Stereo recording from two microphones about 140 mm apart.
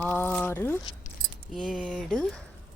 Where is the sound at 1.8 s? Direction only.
5° left (ahead or behind).